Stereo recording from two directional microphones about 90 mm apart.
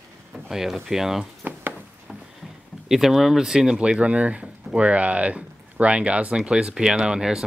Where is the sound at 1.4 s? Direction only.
20° right (ahead or behind).